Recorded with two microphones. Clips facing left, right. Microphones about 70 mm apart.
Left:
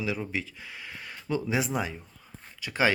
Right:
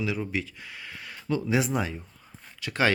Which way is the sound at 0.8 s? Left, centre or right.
Centre.